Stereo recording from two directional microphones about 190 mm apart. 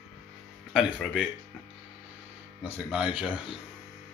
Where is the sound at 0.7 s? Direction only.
Centre (ahead or behind).